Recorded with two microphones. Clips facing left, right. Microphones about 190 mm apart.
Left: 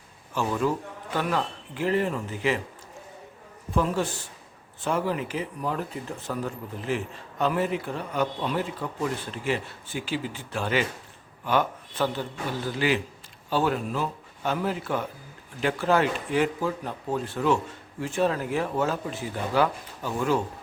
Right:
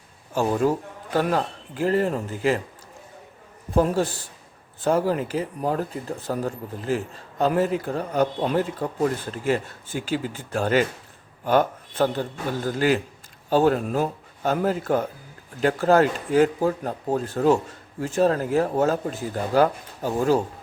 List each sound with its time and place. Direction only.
0.3 s speech: 40° right (ahead or behind)
3.8 s a man's voice: 35° right (ahead or behind)